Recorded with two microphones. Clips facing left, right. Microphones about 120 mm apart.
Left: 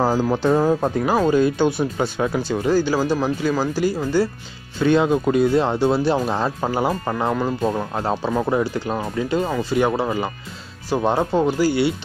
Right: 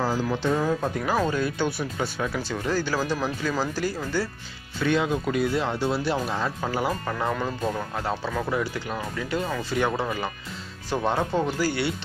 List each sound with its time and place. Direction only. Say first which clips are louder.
0.0 s speech: left 6 dB; 40° left (ahead or behind); by 4.3 s 15° left (ahead or behind)
4.7 s speech: left 7 dB; 30° left (ahead or behind)